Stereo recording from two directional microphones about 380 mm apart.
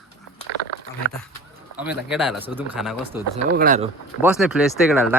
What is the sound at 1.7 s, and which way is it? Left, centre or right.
Speech, centre.